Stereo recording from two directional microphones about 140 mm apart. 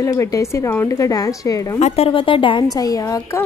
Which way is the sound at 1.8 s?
50° left (ahead or behind).